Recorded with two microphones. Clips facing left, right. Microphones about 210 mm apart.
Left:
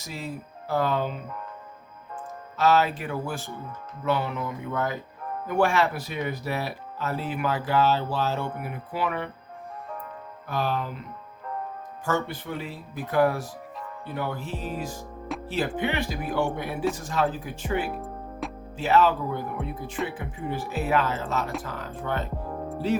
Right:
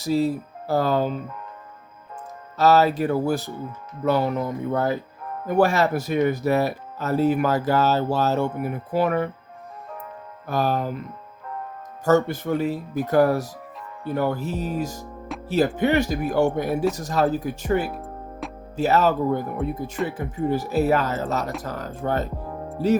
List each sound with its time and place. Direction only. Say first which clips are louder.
0.0 s speech: right 14 dB; 35° right (ahead or behind)
2.6 s speech: right 5 dB; 40° right (ahead or behind)
10.4 s speech: right 5 dB; 40° right (ahead or behind)
12.0 s speech: right 9 dB; 40° right (ahead or behind)
18.0 s music: even; centre (ahead or behind)
18.8 s speech: right 2 dB; 40° right (ahead or behind)